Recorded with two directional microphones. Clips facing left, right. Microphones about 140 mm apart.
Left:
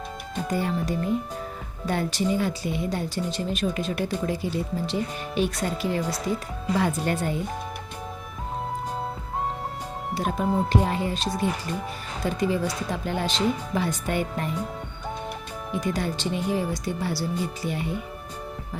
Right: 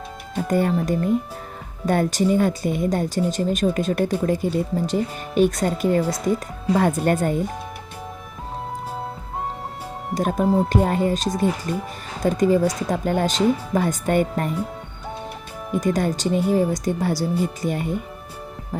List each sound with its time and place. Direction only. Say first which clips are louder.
0.4 s speech: right 6 dB; 50° right (ahead or behind)
10.2 s speech: right 6 dB; 45° right (ahead or behind)
10.4 s speech: right 6 dB; centre (ahead or behind)
10.7 s speech: right 5 dB; 45° right (ahead or behind)
15.7 s speech: right 6 dB; 45° right (ahead or behind)